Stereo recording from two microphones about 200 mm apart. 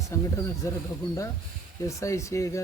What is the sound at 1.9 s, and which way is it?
Speech, 15° left (ahead or behind).